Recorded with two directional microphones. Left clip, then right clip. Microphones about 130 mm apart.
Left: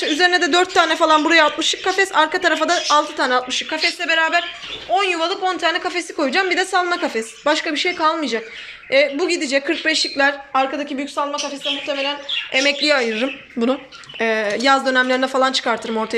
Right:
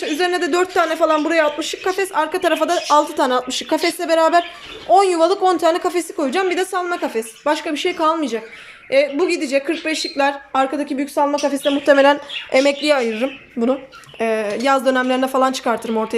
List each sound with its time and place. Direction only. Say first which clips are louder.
0.0 s a woman's voice: left 3 dB; 10° right (ahead or behind)
3.5 s a woman's voice: right 1 dB; 40° right (ahead or behind)
11.6 s a woman's voice: right 11 dB; 90° right
12.5 s a woman's voice: right 2 dB; 25° right (ahead or behind)